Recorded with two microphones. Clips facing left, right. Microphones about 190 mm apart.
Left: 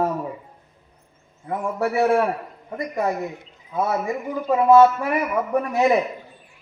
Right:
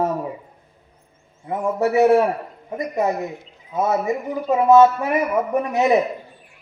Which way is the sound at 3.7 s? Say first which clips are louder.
Right 3 dB; 20° right (ahead or behind).